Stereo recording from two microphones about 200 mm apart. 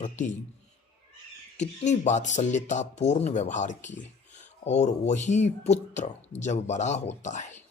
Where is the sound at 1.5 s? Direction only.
35° left (ahead or behind).